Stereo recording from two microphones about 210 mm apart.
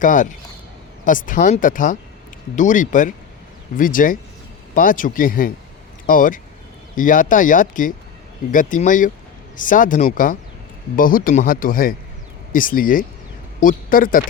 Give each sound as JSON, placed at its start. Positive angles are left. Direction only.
{"t": 0.0, "sound": "speech", "side_deg": 40}